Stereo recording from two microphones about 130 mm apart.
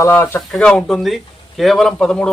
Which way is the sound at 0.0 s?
20° left (ahead or behind).